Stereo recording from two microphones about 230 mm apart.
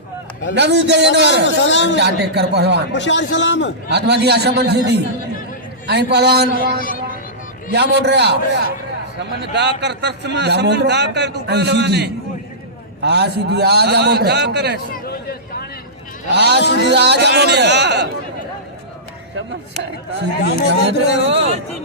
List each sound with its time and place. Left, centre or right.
0.5 s a man's voice: right
1.5 s a man's voice: left
2.0 s a man's voice: right
2.9 s a man's voice: left
3.8 s a man's voice: right
6.8 s a sound: left
7.7 s a man's voice: right
15.0 s a sound: left
16.3 s a man's voice: right
20.7 s a man's voice: right